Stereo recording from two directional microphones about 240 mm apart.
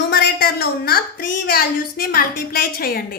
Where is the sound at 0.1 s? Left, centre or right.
Left.